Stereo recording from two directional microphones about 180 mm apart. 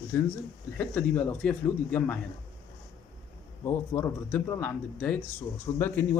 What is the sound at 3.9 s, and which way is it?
A man's voice, 10° left (ahead or behind).